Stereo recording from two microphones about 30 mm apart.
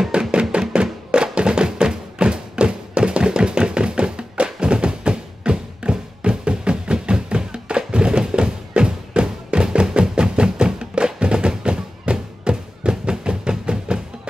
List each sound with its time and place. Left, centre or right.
0.3 s music: right